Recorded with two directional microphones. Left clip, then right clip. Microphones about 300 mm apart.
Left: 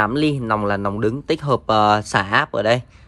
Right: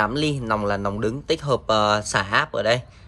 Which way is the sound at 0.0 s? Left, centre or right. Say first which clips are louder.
Left 4 dB; centre.